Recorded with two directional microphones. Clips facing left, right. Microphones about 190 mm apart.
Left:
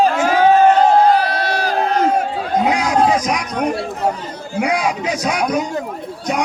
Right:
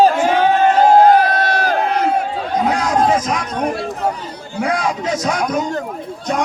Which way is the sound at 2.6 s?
15° left (ahead or behind).